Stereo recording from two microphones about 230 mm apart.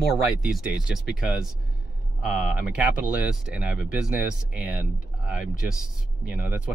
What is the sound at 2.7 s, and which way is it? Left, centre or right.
Speech, centre.